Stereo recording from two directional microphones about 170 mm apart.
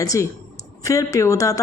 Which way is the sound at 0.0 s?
20° left (ahead or behind).